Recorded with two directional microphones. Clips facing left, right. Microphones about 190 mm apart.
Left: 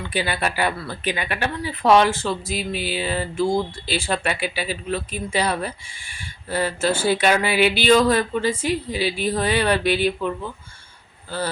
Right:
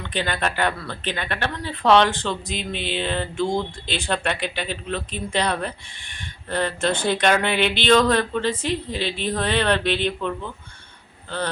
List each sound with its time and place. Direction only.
0.1 s speech: 10° left (ahead or behind)